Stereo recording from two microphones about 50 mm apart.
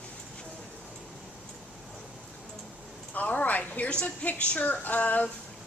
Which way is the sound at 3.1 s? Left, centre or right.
Left.